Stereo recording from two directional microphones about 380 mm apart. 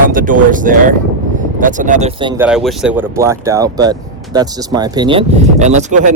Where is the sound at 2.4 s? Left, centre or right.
Centre.